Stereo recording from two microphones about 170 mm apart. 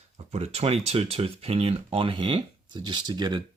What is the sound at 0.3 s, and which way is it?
Speech, 40° right (ahead or behind).